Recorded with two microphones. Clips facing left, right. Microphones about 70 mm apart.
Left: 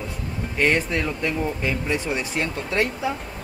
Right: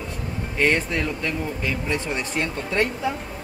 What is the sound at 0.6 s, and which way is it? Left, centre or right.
Speech, centre.